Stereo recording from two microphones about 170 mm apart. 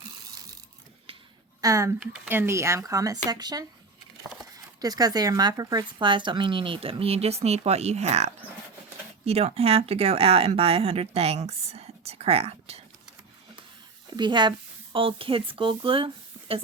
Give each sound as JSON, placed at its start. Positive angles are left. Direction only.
{"t": 0.3, "sound": "ratchet", "side_deg": -20}
{"t": 1.6, "sound": "speech", "side_deg": -15}
{"t": 14.1, "sound": "speech", "side_deg": -25}